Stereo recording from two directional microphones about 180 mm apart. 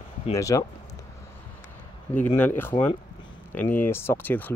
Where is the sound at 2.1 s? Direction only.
10° left (ahead or behind).